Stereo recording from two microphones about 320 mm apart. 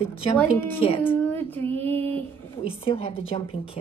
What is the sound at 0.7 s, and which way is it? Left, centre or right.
Speech, centre.